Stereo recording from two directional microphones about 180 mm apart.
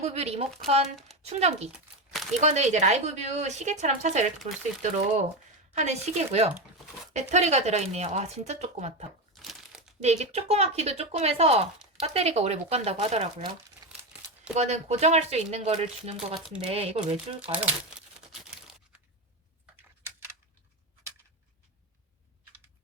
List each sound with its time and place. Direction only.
0.0 s speech: 35° right (ahead or behind)
4.4 s speech: centre (ahead or behind)
5.7 s speech: 40° right (ahead or behind)
9.3 s crumpling: centre (ahead or behind)
10.0 s speech: 35° right (ahead or behind)
14.5 s speech: 40° right (ahead or behind)
16.1 s speech: 5° right (ahead or behind)
16.6 s speech: 35° right (ahead or behind)
20.1 s a sound: 15° right (ahead or behind)